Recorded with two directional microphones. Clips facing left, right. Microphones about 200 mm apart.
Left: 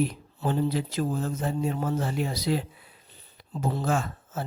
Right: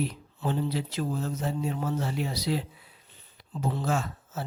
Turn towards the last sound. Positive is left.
turn(degrees=50)  # may be behind; listen again after turning